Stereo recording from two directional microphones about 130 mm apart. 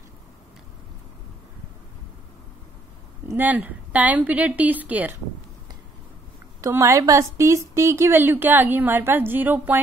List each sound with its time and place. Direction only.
3.3 s speech: 15° right (ahead or behind)
6.6 s speech: 20° right (ahead or behind)